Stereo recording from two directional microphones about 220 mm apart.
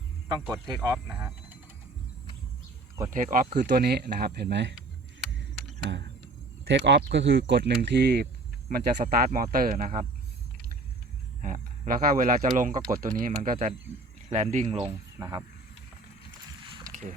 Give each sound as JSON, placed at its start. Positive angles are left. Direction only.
{"t": 0.4, "sound": "speech", "side_deg": -15}
{"t": 3.1, "sound": "speech", "side_deg": -35}
{"t": 6.7, "sound": "speech", "side_deg": -55}
{"t": 11.4, "sound": "speech", "side_deg": -40}
{"t": 15.2, "sound": "speech", "side_deg": -15}